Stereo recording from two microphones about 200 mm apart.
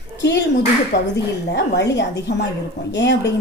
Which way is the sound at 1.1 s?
60° left (ahead or behind).